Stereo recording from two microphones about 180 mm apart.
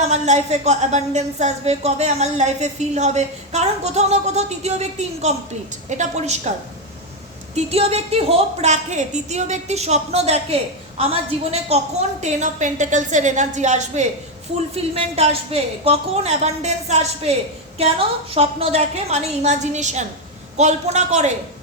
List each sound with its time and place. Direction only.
0.1 s a woman's voice: 40° right (ahead or behind)
7.5 s a woman's voice: 35° right (ahead or behind)
18.3 s a woman's voice: 35° right (ahead or behind)